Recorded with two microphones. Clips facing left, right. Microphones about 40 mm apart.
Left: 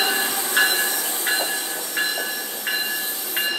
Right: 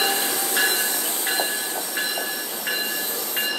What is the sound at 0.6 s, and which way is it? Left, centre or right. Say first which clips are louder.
Train: left 2 dB; left.